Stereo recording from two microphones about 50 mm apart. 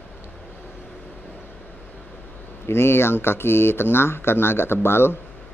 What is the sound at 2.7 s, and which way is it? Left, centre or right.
Speech, left.